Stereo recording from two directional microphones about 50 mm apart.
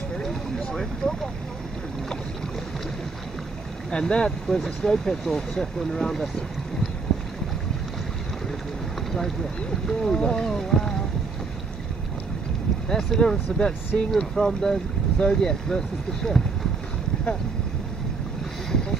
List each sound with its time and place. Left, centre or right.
0.2 s boat: centre
3.9 s speech: centre
9.8 s speech: centre
12.9 s speech: centre